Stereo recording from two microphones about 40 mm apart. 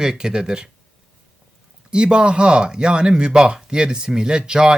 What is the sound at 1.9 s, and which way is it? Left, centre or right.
Speech, right.